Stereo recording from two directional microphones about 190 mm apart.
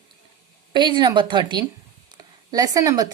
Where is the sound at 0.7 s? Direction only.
25° right (ahead or behind).